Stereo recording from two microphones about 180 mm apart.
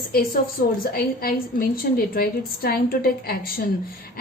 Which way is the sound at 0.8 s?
55° left (ahead or behind).